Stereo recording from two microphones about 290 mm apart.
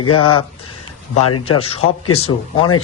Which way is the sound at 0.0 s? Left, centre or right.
Left.